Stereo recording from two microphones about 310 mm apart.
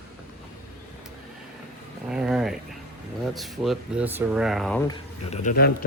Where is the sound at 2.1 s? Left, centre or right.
Centre.